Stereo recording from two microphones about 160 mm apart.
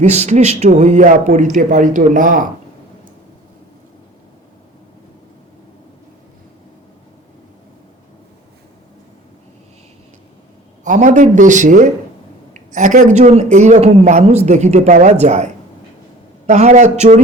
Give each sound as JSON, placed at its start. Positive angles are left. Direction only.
{"t": 0.0, "sound": "speech", "side_deg": -45}
{"t": 10.8, "sound": "speech", "side_deg": -50}
{"t": 16.5, "sound": "speech", "side_deg": -45}